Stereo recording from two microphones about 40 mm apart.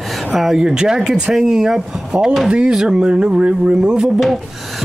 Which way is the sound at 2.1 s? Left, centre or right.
Right.